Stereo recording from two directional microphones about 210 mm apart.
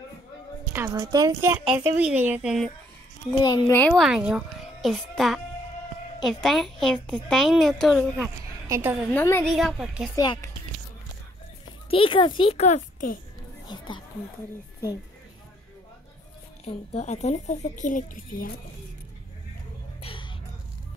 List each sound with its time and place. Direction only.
0.7 s speech: 15° right (ahead or behind)
1.6 s a child's voice: 5° right (ahead or behind)
3.3 s a child's voice: 20° left (ahead or behind)
3.7 s a child's voice: 5° left (ahead or behind)
8.2 s a woman's voice: 10° right (ahead or behind)
9.1 s speech: 10° left (ahead or behind)
9.5 s a child's voice: centre (ahead or behind)
10.1 s speech: 20° left (ahead or behind)
11.9 s a child's voice: 25° left (ahead or behind)
13.7 s speech: 20° left (ahead or behind)
16.6 s a woman's voice: 30° left (ahead or behind)
20.0 s a sound: 25° left (ahead or behind)